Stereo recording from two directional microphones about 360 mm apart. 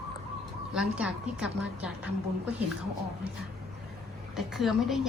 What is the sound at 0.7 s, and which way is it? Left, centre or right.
A woman's voice, centre.